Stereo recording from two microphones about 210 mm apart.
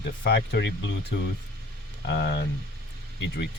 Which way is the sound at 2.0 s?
55° left (ahead or behind).